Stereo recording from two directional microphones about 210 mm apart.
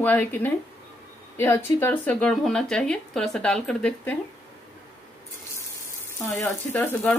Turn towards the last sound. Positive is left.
turn(degrees=10)  # may be behind; listen again after turning